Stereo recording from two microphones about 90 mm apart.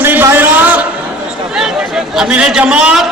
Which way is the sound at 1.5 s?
5° right (ahead or behind).